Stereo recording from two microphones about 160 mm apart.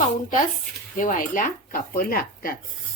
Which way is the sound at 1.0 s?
55° left (ahead or behind).